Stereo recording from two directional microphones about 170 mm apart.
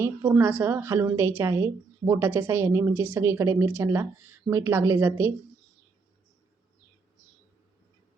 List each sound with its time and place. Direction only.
0.3 s a woman's voice: 10° right (ahead or behind)